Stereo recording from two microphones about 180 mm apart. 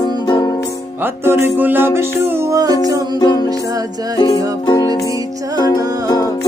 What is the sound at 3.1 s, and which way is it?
Music, 20° left (ahead or behind).